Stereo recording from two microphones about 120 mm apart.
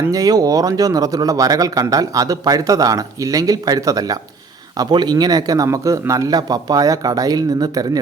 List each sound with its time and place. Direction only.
0.0 s a man's voice: 30° right (ahead or behind)